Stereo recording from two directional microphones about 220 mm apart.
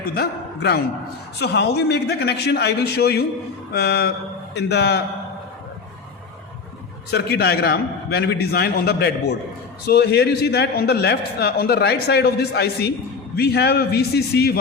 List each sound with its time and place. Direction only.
0.1 s a man's voice: 45° left (ahead or behind)
7.1 s a man's voice: 45° left (ahead or behind)